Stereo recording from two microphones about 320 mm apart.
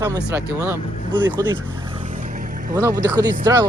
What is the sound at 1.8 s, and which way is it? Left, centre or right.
Vehicle, centre.